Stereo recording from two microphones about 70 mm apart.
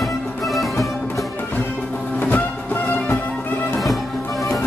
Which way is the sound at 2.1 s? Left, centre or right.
Left.